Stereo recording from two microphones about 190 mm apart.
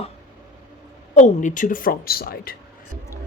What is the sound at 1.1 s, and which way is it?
Speech, 40° left (ahead or behind).